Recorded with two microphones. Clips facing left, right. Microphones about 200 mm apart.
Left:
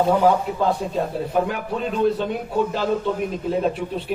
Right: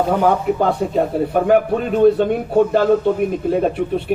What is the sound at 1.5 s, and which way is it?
A man's voice, 55° right (ahead or behind).